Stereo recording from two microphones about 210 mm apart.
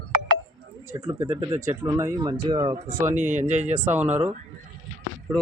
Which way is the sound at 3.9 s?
10° right (ahead or behind).